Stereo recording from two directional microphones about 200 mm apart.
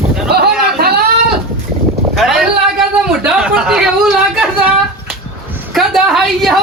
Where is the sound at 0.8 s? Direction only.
50° right (ahead or behind).